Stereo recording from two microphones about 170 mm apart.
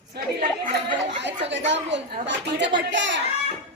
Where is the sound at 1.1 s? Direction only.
90° right.